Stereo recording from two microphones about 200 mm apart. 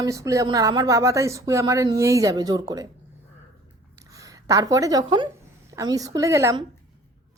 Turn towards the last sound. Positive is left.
turn(degrees=-15)  # may be behind; listen again after turning